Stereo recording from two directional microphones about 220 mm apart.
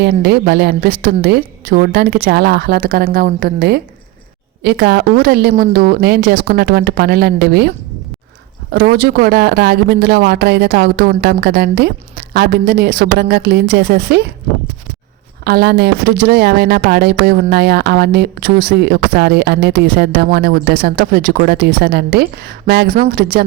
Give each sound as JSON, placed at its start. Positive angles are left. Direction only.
{"t": 0.0, "sound": "speech", "side_deg": -50}
{"t": 8.7, "sound": "speech", "side_deg": -45}
{"t": 15.4, "sound": "speech", "side_deg": -45}